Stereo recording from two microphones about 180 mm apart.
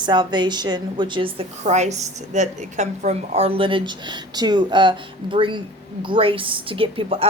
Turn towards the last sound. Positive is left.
turn(degrees=-30)  # may be behind; listen again after turning